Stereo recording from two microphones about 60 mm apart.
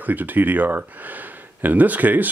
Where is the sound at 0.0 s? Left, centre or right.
Right.